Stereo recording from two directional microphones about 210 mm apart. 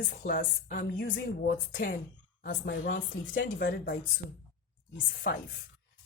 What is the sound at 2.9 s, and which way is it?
Speech, 65° left (ahead or behind).